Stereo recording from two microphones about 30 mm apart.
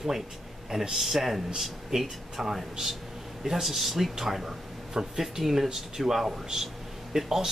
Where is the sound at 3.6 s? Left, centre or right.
Centre.